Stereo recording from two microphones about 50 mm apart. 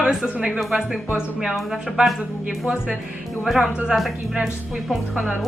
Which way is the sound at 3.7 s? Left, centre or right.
Centre.